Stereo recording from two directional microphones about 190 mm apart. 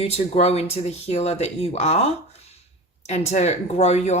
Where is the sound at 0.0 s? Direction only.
35° left (ahead or behind).